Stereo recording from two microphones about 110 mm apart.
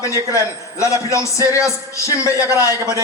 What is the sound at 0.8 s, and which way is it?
A man's voice, 25° left (ahead or behind).